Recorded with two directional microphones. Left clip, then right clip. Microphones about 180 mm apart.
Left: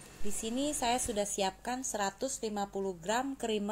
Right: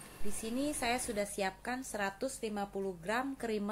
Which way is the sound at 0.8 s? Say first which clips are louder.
Left 4 dB; 15° left (ahead or behind).